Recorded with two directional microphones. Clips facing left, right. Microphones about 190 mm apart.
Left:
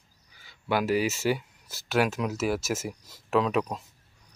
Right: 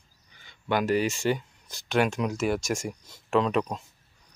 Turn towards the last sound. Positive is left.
turn(degrees=5)  # may be behind; listen again after turning